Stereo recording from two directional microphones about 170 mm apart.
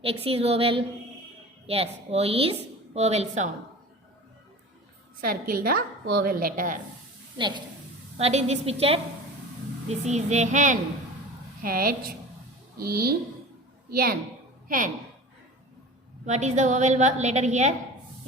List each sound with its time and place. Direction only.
0.0 s a woman's voice: 35° right (ahead or behind)
5.2 s a woman's voice: 60° right (ahead or behind)
7.3 s a woman's voice: 25° right (ahead or behind)
8.2 s a woman's voice: 40° right (ahead or behind)
11.6 s a woman's voice: 55° right (ahead or behind)
16.2 s a woman's voice: 45° right (ahead or behind)